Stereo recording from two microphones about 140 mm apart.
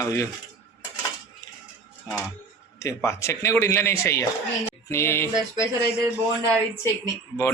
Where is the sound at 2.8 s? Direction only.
20° left (ahead or behind).